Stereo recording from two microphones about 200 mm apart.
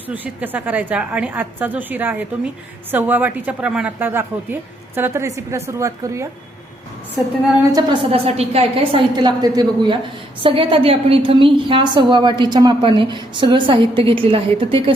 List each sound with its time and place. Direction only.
0.1 s a woman's voice: 10° right (ahead or behind)
7.8 s a woman's voice: 30° right (ahead or behind)